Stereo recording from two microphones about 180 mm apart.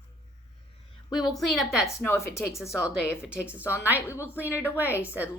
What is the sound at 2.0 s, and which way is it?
Music, 15° left (ahead or behind).